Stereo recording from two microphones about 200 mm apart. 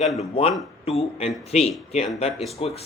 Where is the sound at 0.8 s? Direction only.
30° left (ahead or behind).